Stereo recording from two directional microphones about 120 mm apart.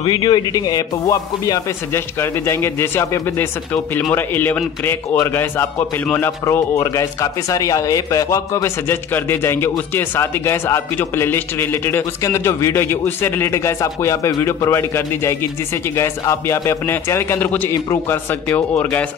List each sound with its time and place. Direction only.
0.0 s a man's voice: 35° left (ahead or behind); by 19.0 s 10° left (ahead or behind)